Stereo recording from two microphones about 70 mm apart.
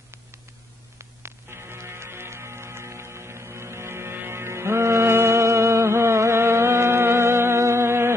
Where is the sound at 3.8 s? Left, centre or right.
Right.